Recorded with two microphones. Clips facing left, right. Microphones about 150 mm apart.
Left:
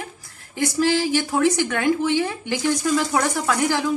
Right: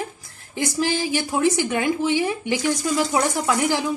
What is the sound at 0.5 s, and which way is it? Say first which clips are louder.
A woman's voice: left 3 dB; 20° right (ahead or behind).